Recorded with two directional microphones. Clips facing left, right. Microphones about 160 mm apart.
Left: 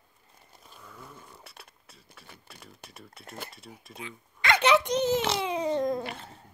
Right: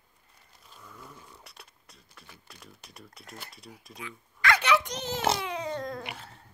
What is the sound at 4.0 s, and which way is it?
Babbling, 20° left (ahead or behind).